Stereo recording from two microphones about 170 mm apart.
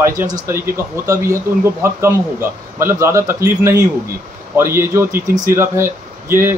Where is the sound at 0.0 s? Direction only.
15° right (ahead or behind).